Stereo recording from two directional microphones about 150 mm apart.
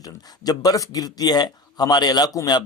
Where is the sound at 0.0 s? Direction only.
25° left (ahead or behind).